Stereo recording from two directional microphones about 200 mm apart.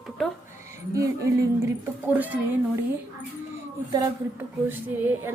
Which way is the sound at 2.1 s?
10° right (ahead or behind).